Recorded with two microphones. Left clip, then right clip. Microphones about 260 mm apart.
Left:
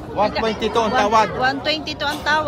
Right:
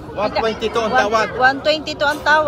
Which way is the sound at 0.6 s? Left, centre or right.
Left.